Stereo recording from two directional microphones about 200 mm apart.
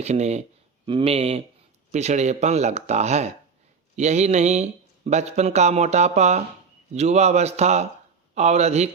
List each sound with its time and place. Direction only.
0.0 s speech: 35° right (ahead or behind)